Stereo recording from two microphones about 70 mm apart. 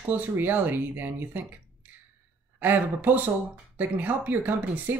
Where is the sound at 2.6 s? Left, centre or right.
Right.